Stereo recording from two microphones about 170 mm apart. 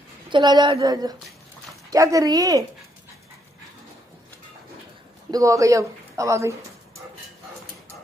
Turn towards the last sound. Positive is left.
turn(degrees=-15)  # may be behind; listen again after turning